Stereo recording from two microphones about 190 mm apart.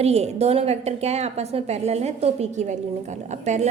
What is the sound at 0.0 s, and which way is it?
A woman's voice, 35° right (ahead or behind).